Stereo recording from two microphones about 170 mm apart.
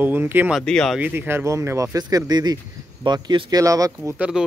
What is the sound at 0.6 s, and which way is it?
Speech, 5° left (ahead or behind).